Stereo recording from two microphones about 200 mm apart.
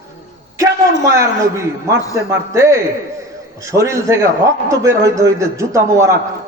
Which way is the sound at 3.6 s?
15° right (ahead or behind).